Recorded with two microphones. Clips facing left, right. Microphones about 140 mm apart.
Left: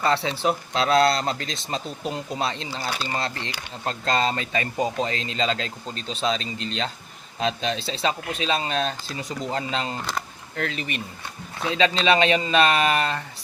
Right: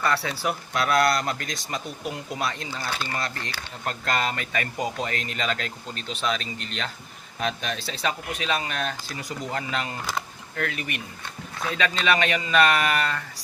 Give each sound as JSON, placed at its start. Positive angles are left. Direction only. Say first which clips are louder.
{"t": 0.0, "sound": "speech", "louder": "left 3 dB", "side_deg": 25}